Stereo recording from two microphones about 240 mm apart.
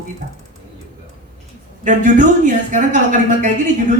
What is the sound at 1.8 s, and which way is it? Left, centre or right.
Speech, right.